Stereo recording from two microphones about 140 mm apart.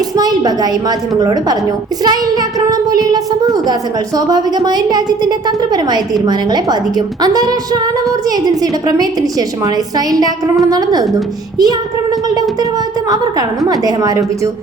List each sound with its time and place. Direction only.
0.2 s a woman's voice: 30° right (ahead or behind)
2.0 s a sound: 25° right (ahead or behind)
4.3 s a woman's voice: 25° right (ahead or behind)
13.6 s a woman's voice: 25° right (ahead or behind)